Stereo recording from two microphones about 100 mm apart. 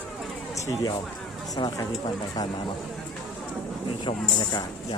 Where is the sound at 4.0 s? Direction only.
45° left (ahead or behind).